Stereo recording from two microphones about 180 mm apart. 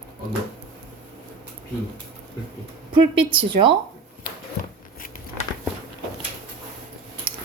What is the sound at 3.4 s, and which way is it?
Speech, 30° right (ahead or behind).